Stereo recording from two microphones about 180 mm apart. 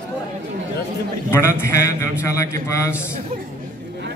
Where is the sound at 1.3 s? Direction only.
15° left (ahead or behind).